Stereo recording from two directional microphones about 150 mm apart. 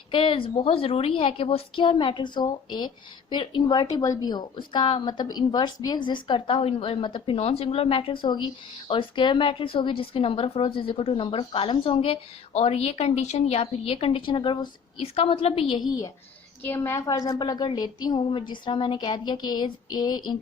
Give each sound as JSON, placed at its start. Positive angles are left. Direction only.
{"t": 0.1, "sound": "a woman's voice", "side_deg": 35}
{"t": 15.9, "sound": "a woman's voice", "side_deg": 25}